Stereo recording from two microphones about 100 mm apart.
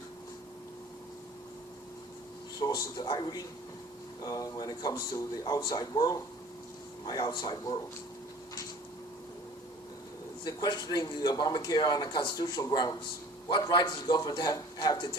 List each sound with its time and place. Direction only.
2.6 s speech: 40° left (ahead or behind)
10.4 s speech: 45° left (ahead or behind)